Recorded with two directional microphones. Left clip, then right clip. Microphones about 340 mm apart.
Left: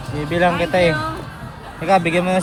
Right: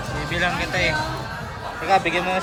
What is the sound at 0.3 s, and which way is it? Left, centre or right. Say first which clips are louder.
Speech: left 7 dB; centre.